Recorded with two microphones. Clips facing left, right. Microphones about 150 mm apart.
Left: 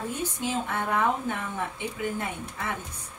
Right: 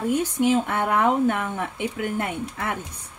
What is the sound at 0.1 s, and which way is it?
Speech, 70° right (ahead or behind).